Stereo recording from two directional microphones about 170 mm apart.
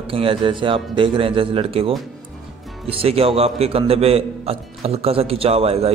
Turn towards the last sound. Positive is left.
turn(degrees=-35)  # may be behind; listen again after turning